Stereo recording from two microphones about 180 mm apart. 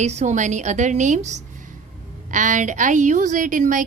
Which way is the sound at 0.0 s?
40° right (ahead or behind).